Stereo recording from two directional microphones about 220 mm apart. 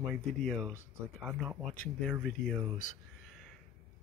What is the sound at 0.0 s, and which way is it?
Speech, centre (ahead or behind).